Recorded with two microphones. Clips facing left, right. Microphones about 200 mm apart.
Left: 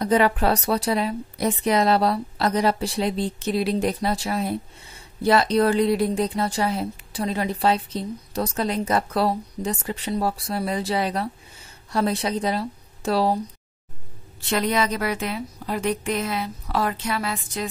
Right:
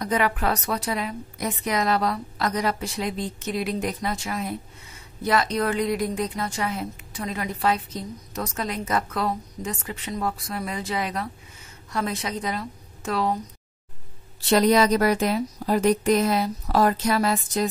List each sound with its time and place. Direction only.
0.0 s a woman's voice: 30° left (ahead or behind)
14.5 s a woman's voice: 40° right (ahead or behind)